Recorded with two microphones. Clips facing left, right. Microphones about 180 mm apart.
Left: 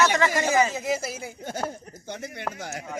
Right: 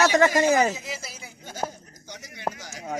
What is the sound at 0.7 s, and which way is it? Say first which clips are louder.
Speech: left 9 dB; 50° left (ahead or behind).